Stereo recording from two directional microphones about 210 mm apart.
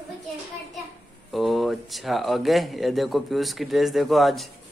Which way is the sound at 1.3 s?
Centre (ahead or behind).